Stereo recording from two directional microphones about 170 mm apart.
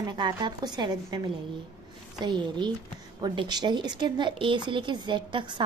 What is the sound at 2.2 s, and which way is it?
A woman's voice, 25° right (ahead or behind).